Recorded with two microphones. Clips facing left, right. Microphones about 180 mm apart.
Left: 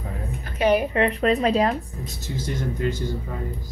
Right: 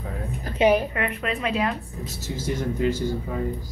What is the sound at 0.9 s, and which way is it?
Speech, 30° left (ahead or behind).